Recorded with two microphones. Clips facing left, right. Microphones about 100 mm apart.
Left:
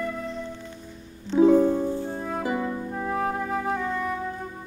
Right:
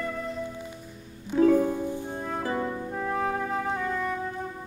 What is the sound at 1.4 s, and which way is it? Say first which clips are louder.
Music: left 3 dB; 15° left (ahead or behind).